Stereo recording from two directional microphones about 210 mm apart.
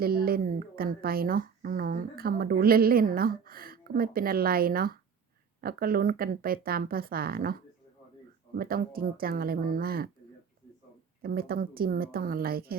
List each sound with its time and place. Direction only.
0.0 s a woman's voice: 45° right (ahead or behind)
8.5 s a woman's voice: 45° right (ahead or behind)
11.2 s a woman's voice: 45° right (ahead or behind)